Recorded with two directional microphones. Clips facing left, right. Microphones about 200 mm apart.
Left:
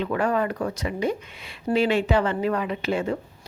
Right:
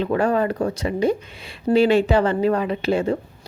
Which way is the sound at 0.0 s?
30° right (ahead or behind).